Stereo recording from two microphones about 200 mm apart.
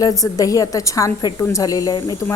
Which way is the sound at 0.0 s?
15° left (ahead or behind).